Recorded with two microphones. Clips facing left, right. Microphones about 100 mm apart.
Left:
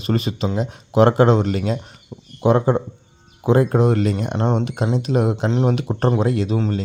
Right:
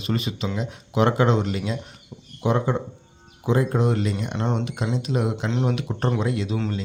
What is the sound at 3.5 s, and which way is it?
Speech, 55° left (ahead or behind).